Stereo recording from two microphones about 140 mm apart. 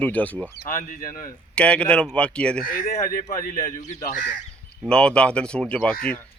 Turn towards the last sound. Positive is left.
turn(degrees=10)  # may be behind; listen again after turning